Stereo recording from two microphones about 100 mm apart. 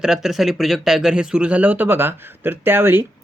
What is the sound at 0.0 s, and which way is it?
Speech, 5° right (ahead or behind).